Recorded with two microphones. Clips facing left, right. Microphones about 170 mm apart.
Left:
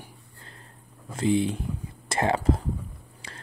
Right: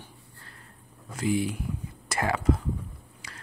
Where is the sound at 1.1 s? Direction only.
25° left (ahead or behind).